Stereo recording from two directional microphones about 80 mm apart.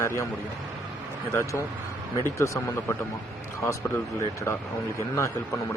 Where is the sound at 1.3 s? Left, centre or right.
Left.